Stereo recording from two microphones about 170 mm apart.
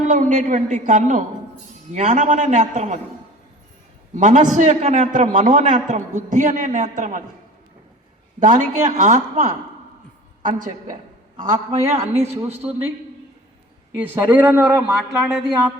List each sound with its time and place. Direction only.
0.1 s a man's voice: 45° right (ahead or behind)
4.1 s a man's voice: 45° right (ahead or behind)
8.4 s a man's voice: 45° right (ahead or behind)
14.1 s a man's voice: 10° right (ahead or behind)